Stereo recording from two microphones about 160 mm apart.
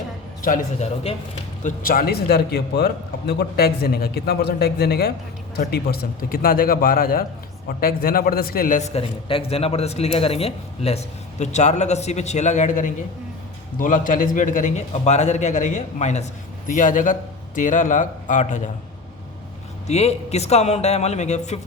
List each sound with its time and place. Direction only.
0.4 s a man's voice: 55° left (ahead or behind)
19.9 s a man's voice: 40° left (ahead or behind)